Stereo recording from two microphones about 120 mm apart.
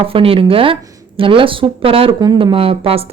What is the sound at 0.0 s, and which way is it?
Speech, 50° right (ahead or behind).